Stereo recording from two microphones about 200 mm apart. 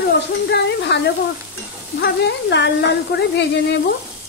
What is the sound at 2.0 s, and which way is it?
A woman's voice, 60° left (ahead or behind).